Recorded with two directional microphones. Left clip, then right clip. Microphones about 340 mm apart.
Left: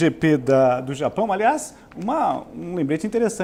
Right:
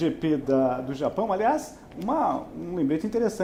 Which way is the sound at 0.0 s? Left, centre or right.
Left.